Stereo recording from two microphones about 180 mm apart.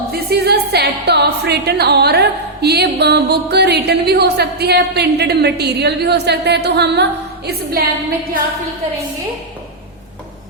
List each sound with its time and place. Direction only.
0.1 s speech: 60° right (ahead or behind)